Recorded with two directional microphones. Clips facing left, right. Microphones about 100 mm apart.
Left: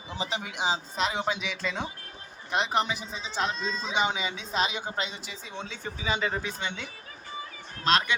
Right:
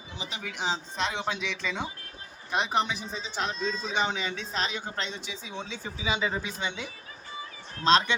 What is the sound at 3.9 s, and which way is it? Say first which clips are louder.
Speech: left 3 dB; 15° left (ahead or behind).